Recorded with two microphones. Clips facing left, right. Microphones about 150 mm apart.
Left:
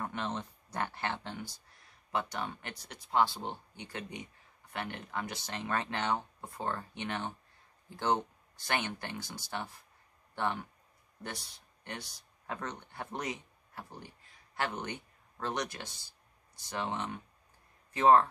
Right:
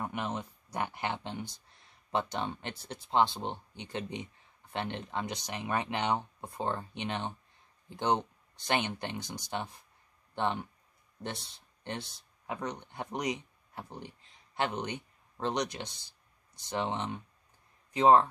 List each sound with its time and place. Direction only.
0.0 s speech: 15° right (ahead or behind)